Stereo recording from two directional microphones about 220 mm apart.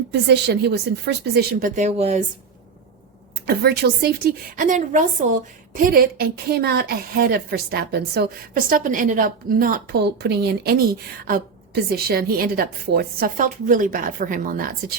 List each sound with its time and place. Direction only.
0.1 s a woman's voice: 50° right (ahead or behind); by 2.2 s 30° right (ahead or behind)
3.4 s a woman's voice: 45° right (ahead or behind)